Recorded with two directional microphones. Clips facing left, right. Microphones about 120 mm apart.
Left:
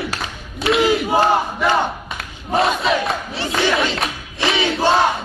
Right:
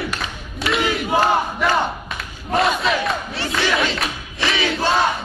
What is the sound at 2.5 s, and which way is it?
Battle cry, centre (ahead or behind).